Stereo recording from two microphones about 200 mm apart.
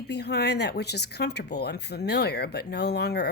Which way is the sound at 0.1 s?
55° left (ahead or behind).